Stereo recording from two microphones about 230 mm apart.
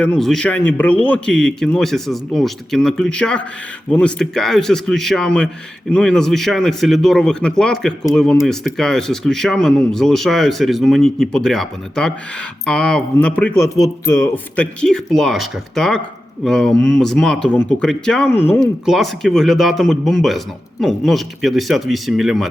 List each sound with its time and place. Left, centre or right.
0.0 s speech: centre